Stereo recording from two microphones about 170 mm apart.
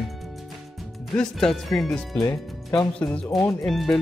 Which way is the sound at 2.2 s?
20° left (ahead or behind).